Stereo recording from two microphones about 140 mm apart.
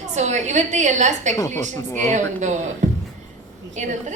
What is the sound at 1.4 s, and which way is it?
Speech, 25° left (ahead or behind).